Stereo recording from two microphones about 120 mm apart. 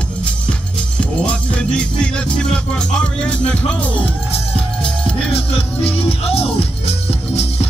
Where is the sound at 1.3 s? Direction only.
10° left (ahead or behind).